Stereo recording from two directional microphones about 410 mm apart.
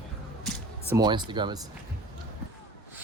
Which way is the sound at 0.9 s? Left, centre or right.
Centre.